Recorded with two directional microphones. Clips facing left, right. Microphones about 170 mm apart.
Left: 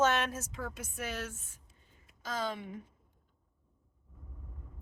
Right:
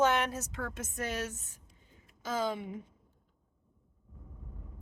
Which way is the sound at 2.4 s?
15° right (ahead or behind).